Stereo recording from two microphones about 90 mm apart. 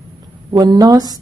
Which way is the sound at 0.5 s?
50° right (ahead or behind).